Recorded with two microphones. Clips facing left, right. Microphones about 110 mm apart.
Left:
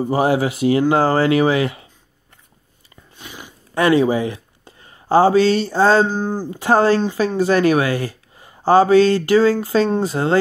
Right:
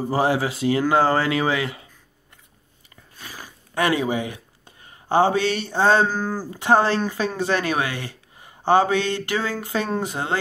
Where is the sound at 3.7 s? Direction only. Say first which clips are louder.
Left 6 dB; 30° left (ahead or behind).